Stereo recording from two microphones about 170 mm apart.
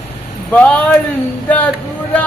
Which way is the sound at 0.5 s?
10° left (ahead or behind).